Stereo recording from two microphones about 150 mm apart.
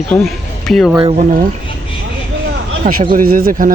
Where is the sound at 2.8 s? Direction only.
60° right (ahead or behind).